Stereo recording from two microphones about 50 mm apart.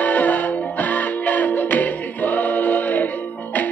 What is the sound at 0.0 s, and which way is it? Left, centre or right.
Music, left.